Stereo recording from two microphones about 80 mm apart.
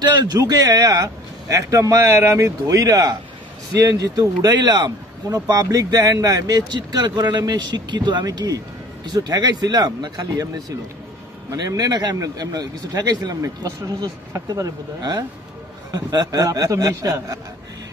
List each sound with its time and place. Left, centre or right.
0.0 s a man's voice: right
8.3 s speech: right
11.5 s a man's voice: right